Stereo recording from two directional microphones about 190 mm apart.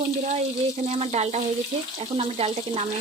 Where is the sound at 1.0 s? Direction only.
35° right (ahead or behind).